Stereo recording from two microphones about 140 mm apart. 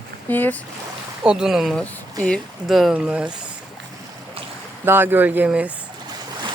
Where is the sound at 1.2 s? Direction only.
5° right (ahead or behind).